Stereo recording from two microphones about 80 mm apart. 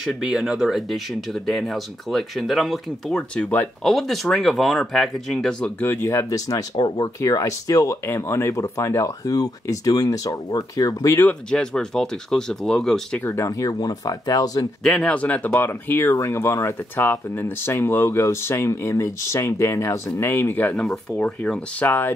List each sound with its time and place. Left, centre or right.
0.0 s speech: centre
3.2 s speech: centre
3.8 s speech: centre
5.8 s speech: left
6.0 s speech: left
8.1 s speech: left
11.5 s speech: centre
13.2 s speech: left
13.5 s speech: left
14.8 s speech: centre; by 20.7 s left
20.7 s speech: centre